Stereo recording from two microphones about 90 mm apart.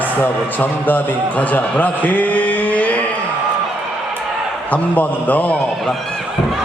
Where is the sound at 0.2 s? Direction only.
20° left (ahead or behind).